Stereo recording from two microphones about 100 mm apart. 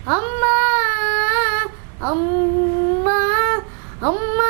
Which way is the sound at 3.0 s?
15° right (ahead or behind).